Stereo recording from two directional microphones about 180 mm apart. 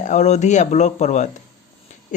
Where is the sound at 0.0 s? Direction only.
40° left (ahead or behind).